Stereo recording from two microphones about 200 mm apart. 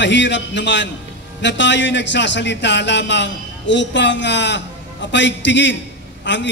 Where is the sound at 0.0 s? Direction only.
60° left (ahead or behind).